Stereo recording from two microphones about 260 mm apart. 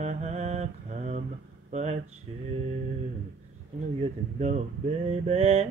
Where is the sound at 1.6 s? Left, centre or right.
Right.